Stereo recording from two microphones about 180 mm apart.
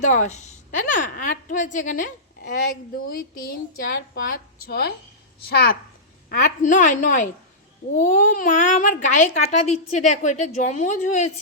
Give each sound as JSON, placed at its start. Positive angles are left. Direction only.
{"t": 0.0, "sound": "a woman's voice", "side_deg": 40}
{"t": 6.2, "sound": "a woman's voice", "side_deg": 45}